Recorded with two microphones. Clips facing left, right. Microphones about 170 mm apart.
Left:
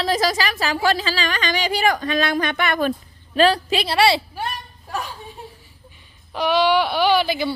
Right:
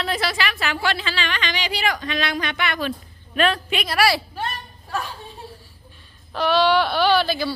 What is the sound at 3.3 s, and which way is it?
Speech, 35° left (ahead or behind).